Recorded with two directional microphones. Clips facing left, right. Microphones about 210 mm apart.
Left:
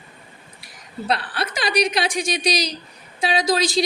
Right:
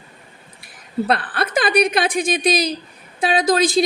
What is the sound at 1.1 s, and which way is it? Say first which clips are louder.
A woman's voice: even; 55° right (ahead or behind).